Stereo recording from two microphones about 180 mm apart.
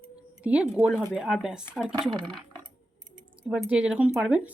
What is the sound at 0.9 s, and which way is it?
Speech, 5° left (ahead or behind).